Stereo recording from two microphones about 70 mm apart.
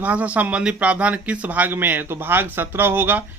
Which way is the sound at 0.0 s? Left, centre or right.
Right.